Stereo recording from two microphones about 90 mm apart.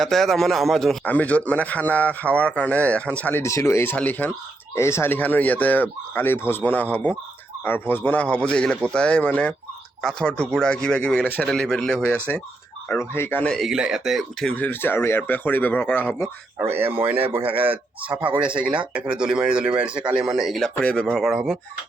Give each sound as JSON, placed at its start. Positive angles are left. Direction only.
{"t": 0.0, "sound": "speech", "side_deg": 5}
{"t": 1.0, "sound": "speech", "side_deg": 20}
{"t": 3.4, "sound": "speech", "side_deg": 35}
{"t": 3.9, "sound": "speech", "side_deg": 20}
{"t": 4.7, "sound": "speech", "side_deg": 30}
{"t": 13.5, "sound": "speech", "side_deg": -5}
{"t": 14.5, "sound": "speech", "side_deg": 20}
{"t": 16.6, "sound": "speech", "side_deg": -25}
{"t": 21.2, "sound": "speech", "side_deg": -5}